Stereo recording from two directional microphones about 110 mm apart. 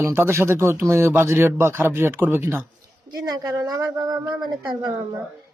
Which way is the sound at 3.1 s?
35° right (ahead or behind).